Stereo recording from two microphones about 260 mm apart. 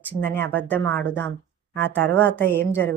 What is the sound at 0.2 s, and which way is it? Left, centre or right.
Speech, centre.